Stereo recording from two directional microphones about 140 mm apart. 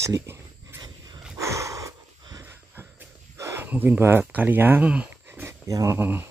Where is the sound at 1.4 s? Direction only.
20° right (ahead or behind).